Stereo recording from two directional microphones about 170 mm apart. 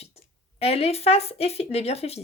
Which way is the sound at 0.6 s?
35° left (ahead or behind).